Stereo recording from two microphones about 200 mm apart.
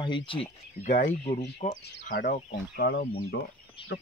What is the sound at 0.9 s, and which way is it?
Speech, 40° left (ahead or behind).